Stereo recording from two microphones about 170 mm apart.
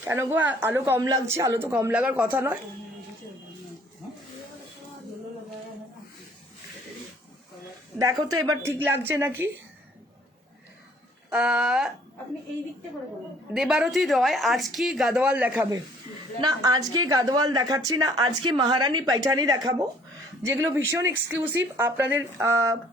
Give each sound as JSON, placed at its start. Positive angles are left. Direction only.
{"t": 0.0, "sound": "speech", "side_deg": -15}
{"t": 7.9, "sound": "speech", "side_deg": -20}
{"t": 11.3, "sound": "speech", "side_deg": -5}
{"t": 13.5, "sound": "speech", "side_deg": -5}
{"t": 16.4, "sound": "a woman's voice", "side_deg": -20}